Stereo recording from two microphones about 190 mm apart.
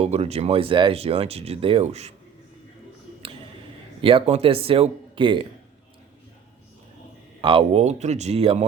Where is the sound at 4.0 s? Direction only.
30° right (ahead or behind).